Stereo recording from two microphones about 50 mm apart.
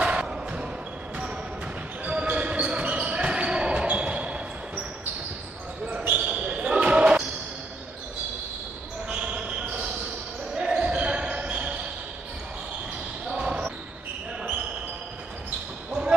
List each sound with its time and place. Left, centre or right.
0.0 s basketball bounce: right
2.0 s basketball bounce: right
5.9 s basketball bounce: right
9.1 s basketball bounce: right
13.3 s basketball bounce: centre